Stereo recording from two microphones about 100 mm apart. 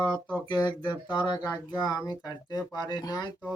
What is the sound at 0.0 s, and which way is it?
Speech, 20° right (ahead or behind).